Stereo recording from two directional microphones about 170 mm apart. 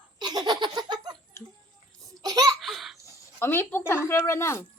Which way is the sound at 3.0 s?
15° left (ahead or behind).